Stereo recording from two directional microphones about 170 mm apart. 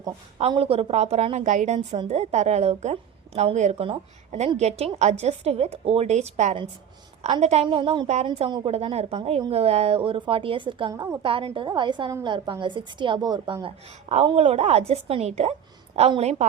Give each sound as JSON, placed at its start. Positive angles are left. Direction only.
{"t": 0.3, "sound": "a woman's voice", "side_deg": -35}